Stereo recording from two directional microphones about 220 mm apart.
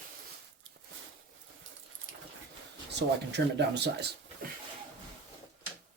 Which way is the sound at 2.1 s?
60° right (ahead or behind).